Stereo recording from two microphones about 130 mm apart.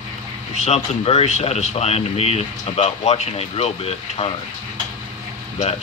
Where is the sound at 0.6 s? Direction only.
60° left (ahead or behind).